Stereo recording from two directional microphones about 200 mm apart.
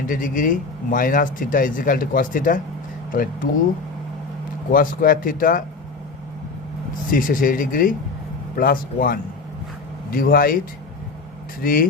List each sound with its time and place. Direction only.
0.1 s speech: 40° left (ahead or behind)
4.7 s speech: 45° left (ahead or behind)
7.1 s speech: 45° left (ahead or behind)
11.6 s speech: 45° left (ahead or behind)